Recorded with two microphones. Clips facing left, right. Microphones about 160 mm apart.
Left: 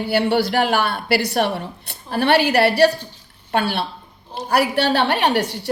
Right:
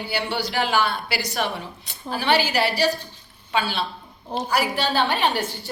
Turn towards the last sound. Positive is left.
turn(degrees=70)  # may be behind; listen again after turning